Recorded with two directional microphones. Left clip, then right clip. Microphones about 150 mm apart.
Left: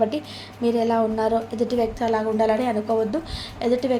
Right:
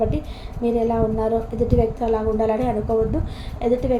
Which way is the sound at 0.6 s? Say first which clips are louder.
Even; 30° left (ahead or behind).